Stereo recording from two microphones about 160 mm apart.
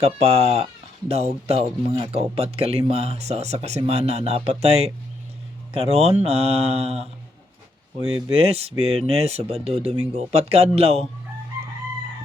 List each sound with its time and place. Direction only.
0.0 s speech: 40° right (ahead or behind)
8.3 s speech: 40° right (ahead or behind)